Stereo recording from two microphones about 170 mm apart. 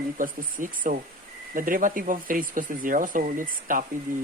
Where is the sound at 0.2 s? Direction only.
50° right (ahead or behind).